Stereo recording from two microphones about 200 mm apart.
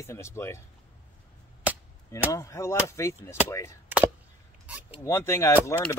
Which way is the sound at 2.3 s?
15° left (ahead or behind).